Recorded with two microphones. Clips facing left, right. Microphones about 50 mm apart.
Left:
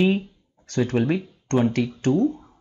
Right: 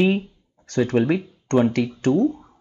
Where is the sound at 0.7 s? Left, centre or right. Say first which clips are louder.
Right 3 dB; right.